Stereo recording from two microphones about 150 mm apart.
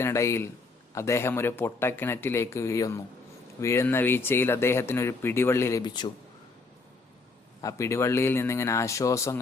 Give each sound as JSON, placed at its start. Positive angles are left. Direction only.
{"t": 0.0, "sound": "speech", "side_deg": 20}
{"t": 5.8, "sound": "speech", "side_deg": 30}
{"t": 7.6, "sound": "speech", "side_deg": 20}